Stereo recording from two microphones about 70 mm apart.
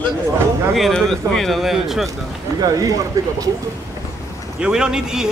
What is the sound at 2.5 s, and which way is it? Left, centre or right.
Speech, right.